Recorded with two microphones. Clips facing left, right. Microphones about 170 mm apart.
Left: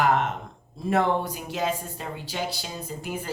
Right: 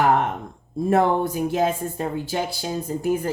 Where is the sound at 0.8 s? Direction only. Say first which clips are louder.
Right 5 dB; 50° right (ahead or behind).